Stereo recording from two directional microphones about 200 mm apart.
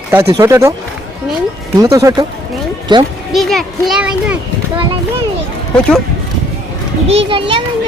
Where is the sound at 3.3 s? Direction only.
Centre (ahead or behind).